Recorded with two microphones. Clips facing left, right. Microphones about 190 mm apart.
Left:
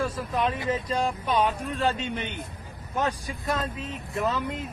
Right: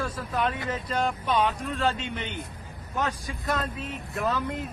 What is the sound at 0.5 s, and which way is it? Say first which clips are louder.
Speech: left 4 dB; 25° left (ahead or behind).